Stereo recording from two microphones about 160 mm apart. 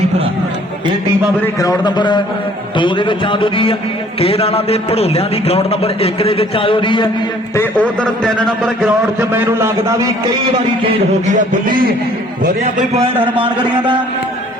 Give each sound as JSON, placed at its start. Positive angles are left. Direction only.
{"t": 1.5, "sound": "a man's voice", "side_deg": 20}
{"t": 7.5, "sound": "a man's voice", "side_deg": 10}
{"t": 9.3, "sound": "a man's voice", "side_deg": -15}
{"t": 10.8, "sound": "a man's voice", "side_deg": -50}
{"t": 13.4, "sound": "a man's voice", "side_deg": -30}